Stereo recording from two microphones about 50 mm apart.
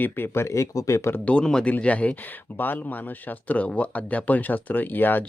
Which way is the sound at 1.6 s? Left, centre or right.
Left.